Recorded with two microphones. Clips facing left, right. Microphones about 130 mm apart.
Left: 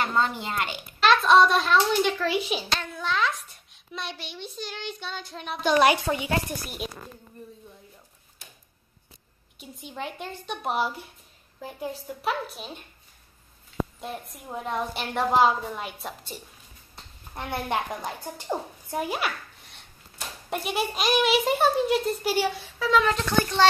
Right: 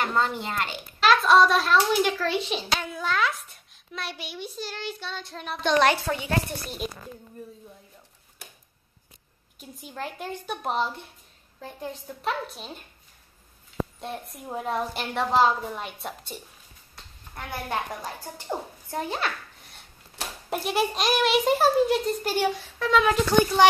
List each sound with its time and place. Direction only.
0.1 s a child's voice: centre (ahead or behind)
2.7 s a child's voice: 5° right (ahead or behind); by 6.3 s 15° left (ahead or behind)
6.6 s a child's voice: centre (ahead or behind)
9.6 s a child's voice: centre (ahead or behind)
14.0 s a child's voice: centre (ahead or behind)
16.9 s a woman's voice: 25° left (ahead or behind)
18.5 s a woman's voice: 15° left (ahead or behind)
20.4 s a child's voice: centre (ahead or behind)